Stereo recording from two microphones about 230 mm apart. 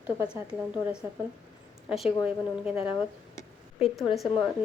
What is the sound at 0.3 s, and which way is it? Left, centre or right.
A woman's voice, centre.